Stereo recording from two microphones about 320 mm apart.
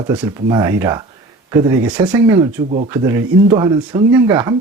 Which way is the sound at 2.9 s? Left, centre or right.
Centre.